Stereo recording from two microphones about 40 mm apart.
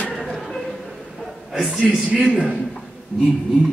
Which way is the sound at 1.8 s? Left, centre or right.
Centre.